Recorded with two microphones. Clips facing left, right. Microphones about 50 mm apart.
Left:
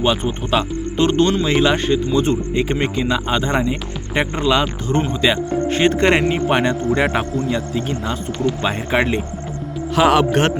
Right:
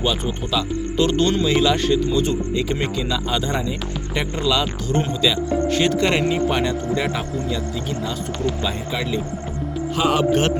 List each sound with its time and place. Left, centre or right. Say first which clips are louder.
0.0 s speech: left 4 dB; left
5.2 s speech: left 2 dB; left
8.6 s speech: left 6 dB; left